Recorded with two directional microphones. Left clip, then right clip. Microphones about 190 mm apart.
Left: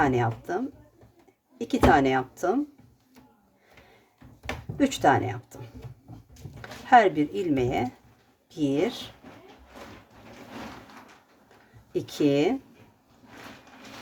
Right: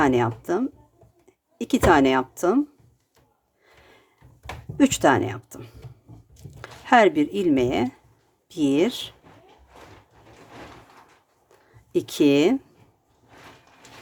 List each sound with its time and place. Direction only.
0.0 s speech: 40° right (ahead or behind)
4.8 s speech: 40° right (ahead or behind)
11.9 s speech: 35° right (ahead or behind)